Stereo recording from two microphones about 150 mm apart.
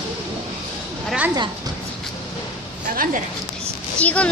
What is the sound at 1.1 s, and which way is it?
Speech, 10° right (ahead or behind).